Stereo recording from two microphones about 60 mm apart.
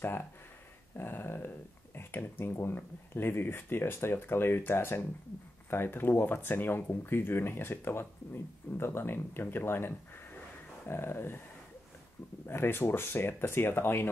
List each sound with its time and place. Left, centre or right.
0.9 s speech: left
12.4 s speech: left